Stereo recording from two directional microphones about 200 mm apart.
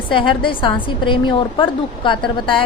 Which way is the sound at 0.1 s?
25° left (ahead or behind).